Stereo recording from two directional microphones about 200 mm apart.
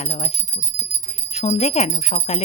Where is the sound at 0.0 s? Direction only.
30° left (ahead or behind).